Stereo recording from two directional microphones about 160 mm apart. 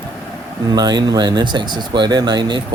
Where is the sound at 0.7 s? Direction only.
25° right (ahead or behind).